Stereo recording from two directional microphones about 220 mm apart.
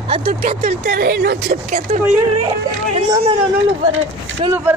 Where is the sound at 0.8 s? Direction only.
45° right (ahead or behind).